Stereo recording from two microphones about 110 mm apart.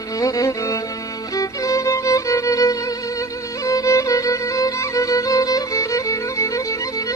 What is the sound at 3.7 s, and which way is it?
Music, 30° left (ahead or behind).